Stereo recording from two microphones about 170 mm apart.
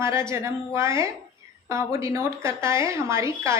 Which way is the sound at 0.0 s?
15° right (ahead or behind).